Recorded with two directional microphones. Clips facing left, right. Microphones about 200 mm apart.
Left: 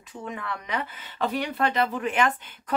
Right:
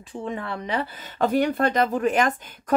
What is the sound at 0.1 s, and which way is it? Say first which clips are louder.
Speech: right 4 dB; 30° right (ahead or behind).